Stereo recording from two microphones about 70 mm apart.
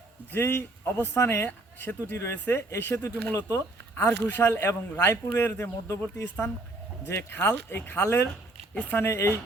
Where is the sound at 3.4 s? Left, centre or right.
Left.